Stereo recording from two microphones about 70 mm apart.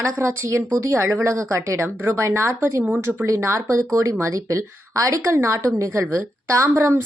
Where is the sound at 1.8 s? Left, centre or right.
Right.